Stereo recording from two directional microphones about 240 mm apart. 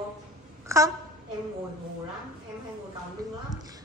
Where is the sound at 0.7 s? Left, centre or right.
Centre.